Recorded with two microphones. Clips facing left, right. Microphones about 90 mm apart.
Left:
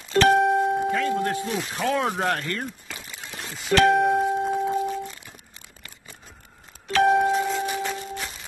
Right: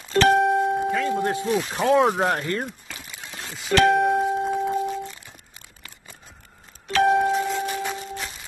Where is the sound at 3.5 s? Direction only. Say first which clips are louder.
Even; centre (ahead or behind).